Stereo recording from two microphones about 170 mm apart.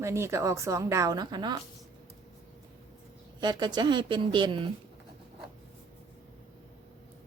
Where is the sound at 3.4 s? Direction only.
25° right (ahead or behind).